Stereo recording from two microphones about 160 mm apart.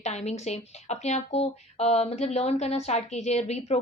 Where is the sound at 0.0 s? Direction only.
45° left (ahead or behind).